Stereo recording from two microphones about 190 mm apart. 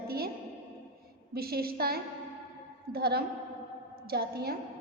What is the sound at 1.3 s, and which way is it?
A woman's voice, 55° right (ahead or behind).